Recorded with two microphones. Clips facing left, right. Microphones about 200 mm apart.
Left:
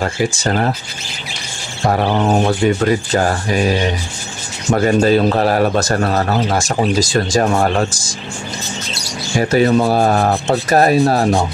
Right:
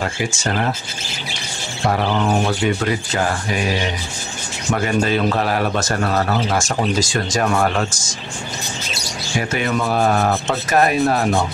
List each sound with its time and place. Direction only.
0.0 s a man's voice: 35° left (ahead or behind)
1.9 s bird: 50° left (ahead or behind)
2.2 s a man's voice: 35° left (ahead or behind)
9.4 s a man's voice: 35° left (ahead or behind)